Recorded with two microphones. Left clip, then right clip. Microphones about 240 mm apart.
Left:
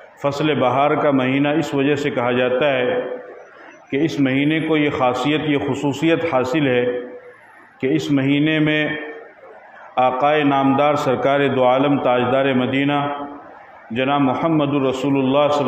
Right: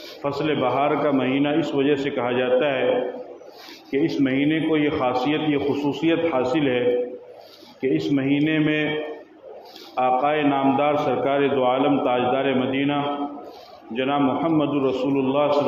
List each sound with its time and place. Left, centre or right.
0.2 s a man's voice: left
3.9 s a man's voice: left
7.8 s a man's voice: left
9.9 s a man's voice: left